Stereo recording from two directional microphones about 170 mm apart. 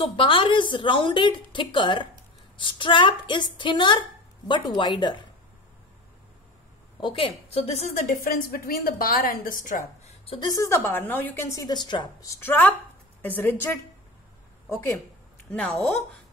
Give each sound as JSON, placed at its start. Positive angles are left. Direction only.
{"t": 0.1, "sound": "a woman's voice", "side_deg": 30}
{"t": 7.0, "sound": "a woman's voice", "side_deg": 30}
{"t": 10.0, "sound": "a sound", "side_deg": 35}
{"t": 10.6, "sound": "a woman's voice", "side_deg": 15}
{"t": 15.5, "sound": "a woman's voice", "side_deg": 10}